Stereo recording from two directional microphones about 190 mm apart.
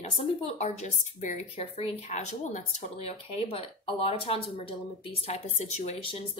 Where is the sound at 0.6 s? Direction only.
35° left (ahead or behind).